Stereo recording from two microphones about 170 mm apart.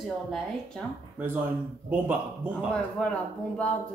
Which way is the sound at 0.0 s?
Centre (ahead or behind).